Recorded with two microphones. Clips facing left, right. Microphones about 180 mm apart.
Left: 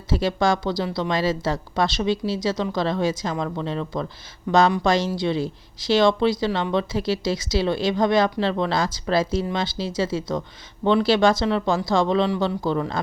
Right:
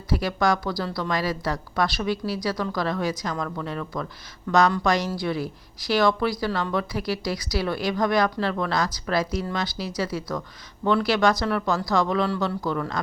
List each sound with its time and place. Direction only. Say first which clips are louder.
0.1 s a woman's voice: left 2 dB; 25° left (ahead or behind)